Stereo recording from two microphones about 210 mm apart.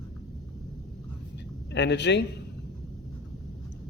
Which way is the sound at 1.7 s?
55° left (ahead or behind).